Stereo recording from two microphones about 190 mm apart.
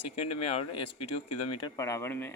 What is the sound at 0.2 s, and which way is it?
A man's voice, 30° left (ahead or behind).